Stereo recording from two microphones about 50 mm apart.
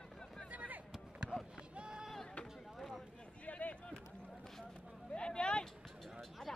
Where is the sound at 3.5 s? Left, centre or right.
Left.